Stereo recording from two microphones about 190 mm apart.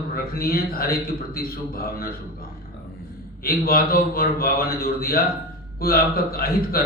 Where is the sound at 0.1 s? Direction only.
50° left (ahead or behind).